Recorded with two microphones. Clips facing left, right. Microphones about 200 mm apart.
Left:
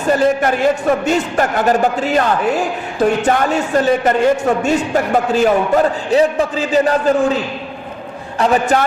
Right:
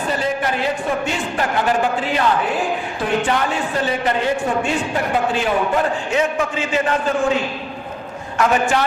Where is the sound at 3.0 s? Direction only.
45° left (ahead or behind).